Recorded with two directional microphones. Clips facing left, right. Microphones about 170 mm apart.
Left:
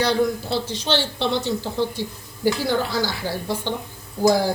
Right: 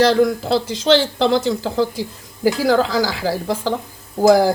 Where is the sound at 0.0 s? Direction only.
90° right.